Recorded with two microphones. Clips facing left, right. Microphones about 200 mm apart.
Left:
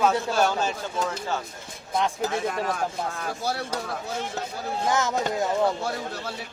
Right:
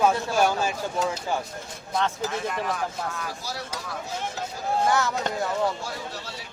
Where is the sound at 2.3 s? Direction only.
45° left (ahead or behind).